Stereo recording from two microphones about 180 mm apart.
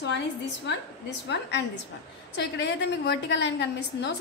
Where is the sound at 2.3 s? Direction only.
75° left (ahead or behind).